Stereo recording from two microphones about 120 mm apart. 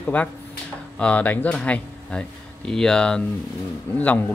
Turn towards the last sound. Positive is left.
turn(degrees=15)  # may be behind; listen again after turning